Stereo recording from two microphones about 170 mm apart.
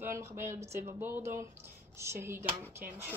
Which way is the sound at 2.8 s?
55° right (ahead or behind).